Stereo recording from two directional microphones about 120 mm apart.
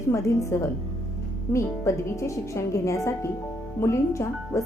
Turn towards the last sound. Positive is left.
turn(degrees=25)  # may be behind; listen again after turning